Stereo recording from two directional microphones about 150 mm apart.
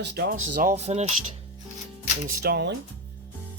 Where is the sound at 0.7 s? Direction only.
45° right (ahead or behind).